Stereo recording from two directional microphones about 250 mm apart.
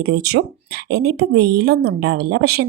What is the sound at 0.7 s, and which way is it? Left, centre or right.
A woman's voice, right.